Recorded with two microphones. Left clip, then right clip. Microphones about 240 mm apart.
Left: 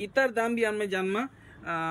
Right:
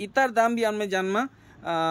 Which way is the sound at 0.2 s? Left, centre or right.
Right.